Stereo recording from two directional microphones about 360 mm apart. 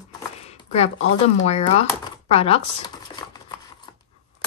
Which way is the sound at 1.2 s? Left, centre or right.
Centre.